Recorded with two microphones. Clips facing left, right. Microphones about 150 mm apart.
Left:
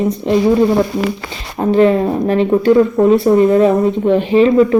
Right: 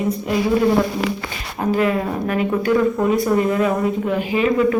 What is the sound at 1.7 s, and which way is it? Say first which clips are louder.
Speech: left 8 dB; 30° left (ahead or behind).